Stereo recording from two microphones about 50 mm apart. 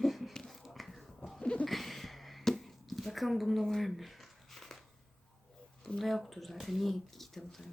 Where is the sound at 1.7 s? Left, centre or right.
Centre.